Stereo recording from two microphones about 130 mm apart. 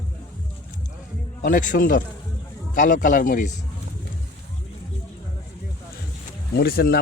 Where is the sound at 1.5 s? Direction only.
90° left.